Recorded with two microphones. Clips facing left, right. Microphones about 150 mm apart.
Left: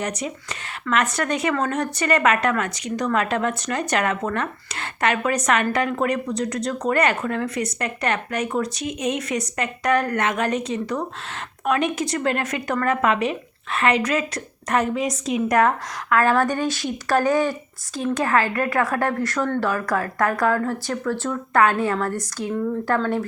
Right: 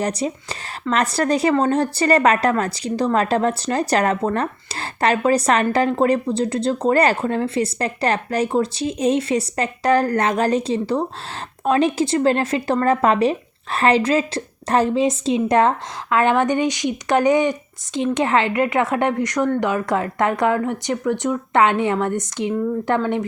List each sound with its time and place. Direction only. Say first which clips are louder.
0.0 s speech: right 5 dB; 35° right (ahead or behind)